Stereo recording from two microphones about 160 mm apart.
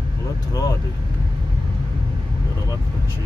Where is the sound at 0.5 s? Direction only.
25° left (ahead or behind).